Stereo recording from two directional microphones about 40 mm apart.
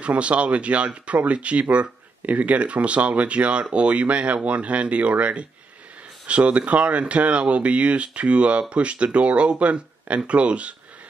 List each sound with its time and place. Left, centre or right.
0.0 s speech: right